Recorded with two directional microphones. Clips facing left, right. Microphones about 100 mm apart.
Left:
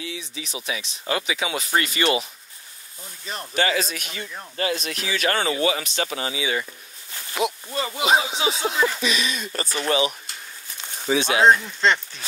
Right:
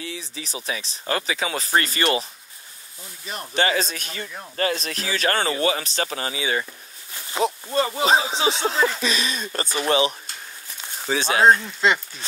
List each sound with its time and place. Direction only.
0.0 s a man's voice: 40° right (ahead or behind)
3.5 s a man's voice: 35° right (ahead or behind)
11.8 s speech: 5° right (ahead or behind)